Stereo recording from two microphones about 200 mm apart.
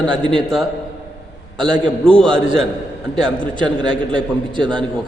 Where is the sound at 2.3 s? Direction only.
25° right (ahead or behind).